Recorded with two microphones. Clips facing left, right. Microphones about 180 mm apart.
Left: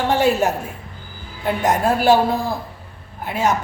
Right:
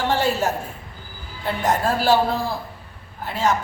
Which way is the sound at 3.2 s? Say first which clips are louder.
Left 2 dB; 20° left (ahead or behind).